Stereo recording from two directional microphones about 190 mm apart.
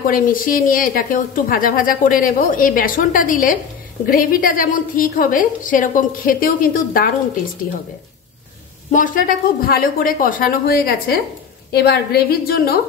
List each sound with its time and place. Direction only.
0.0 s a woman's voice: 45° left (ahead or behind)
8.9 s a woman's voice: 45° left (ahead or behind)